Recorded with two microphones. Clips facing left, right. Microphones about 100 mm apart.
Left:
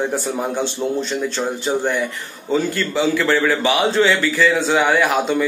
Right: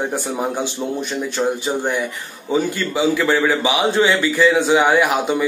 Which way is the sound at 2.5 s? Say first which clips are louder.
Even; 15° right (ahead or behind).